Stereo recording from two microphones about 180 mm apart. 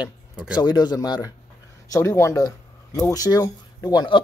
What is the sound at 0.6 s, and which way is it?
Speech, 20° left (ahead or behind).